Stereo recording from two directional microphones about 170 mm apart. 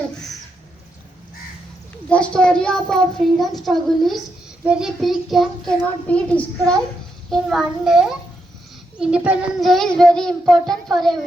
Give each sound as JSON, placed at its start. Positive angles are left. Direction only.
{"t": 2.3, "sound": "a child's voice", "side_deg": 5}